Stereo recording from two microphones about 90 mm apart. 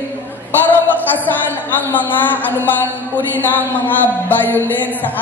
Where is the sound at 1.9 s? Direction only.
20° left (ahead or behind).